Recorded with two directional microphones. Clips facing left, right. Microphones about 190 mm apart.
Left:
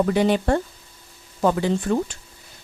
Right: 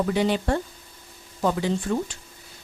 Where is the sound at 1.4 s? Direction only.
60° left (ahead or behind).